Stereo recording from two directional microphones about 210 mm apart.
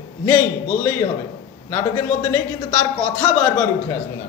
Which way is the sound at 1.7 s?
15° left (ahead or behind).